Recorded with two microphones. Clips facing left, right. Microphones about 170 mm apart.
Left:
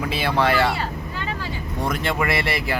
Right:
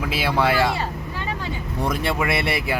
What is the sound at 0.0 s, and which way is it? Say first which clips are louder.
Speech: even; 5° right (ahead or behind).